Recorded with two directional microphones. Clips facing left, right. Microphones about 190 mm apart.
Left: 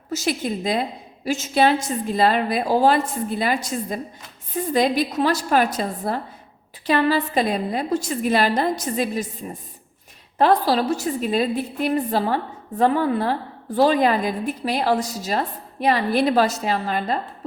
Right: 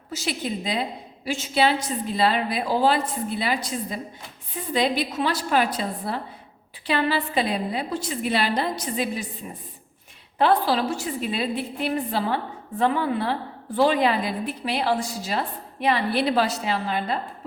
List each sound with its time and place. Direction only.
0.1 s a woman's voice: 45° left (ahead or behind)